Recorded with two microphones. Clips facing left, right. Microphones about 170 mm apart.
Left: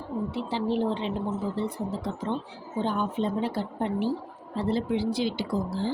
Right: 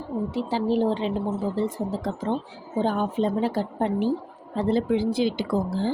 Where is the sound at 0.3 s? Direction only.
40° right (ahead or behind).